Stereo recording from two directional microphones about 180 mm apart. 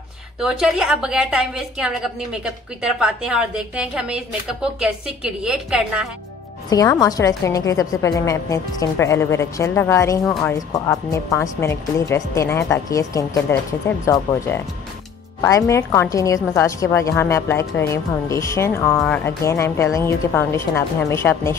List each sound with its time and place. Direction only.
0.4 s a woman's voice: centre (ahead or behind)
6.7 s speech: 20° left (ahead or behind)